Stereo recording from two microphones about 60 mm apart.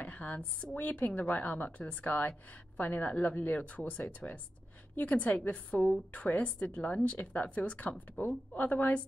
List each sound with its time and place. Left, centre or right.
0.0 s a woman's voice: left